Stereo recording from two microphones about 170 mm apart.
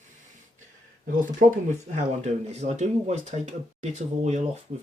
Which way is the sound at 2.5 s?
40° right (ahead or behind).